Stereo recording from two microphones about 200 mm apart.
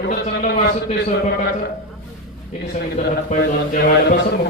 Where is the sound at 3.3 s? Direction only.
50° left (ahead or behind).